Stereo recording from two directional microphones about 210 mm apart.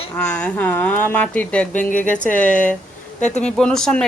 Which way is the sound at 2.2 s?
35° left (ahead or behind).